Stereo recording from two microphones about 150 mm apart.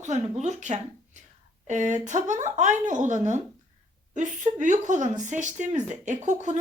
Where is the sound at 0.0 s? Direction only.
50° right (ahead or behind).